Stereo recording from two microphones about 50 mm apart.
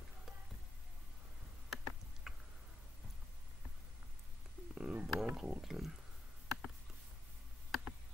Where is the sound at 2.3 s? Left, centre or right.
Centre.